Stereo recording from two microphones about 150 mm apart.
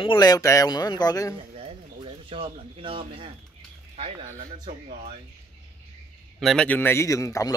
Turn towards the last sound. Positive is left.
turn(degrees=20)  # may be behind; listen again after turning